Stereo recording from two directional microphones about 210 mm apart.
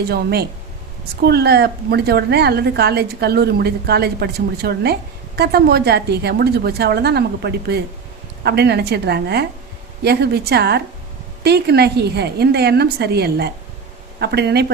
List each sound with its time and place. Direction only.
0.1 s a woman's voice: 50° right (ahead or behind)